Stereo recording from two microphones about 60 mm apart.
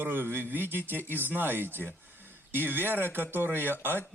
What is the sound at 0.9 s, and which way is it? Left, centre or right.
Speech, left.